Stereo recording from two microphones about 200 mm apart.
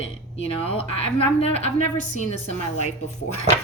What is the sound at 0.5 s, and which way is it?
A woman's voice, 30° left (ahead or behind).